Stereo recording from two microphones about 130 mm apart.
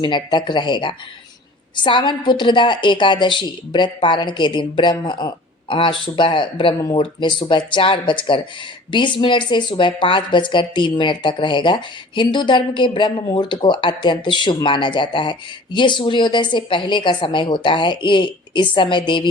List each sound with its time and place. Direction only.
0.0 s speech: 35° left (ahead or behind)